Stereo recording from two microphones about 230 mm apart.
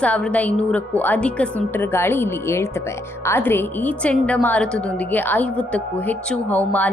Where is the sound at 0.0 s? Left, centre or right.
Centre.